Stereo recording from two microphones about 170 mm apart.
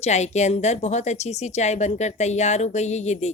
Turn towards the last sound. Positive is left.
turn(degrees=40)  # may be behind; listen again after turning